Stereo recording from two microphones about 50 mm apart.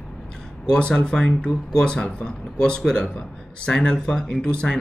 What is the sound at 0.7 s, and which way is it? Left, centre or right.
Speech, centre.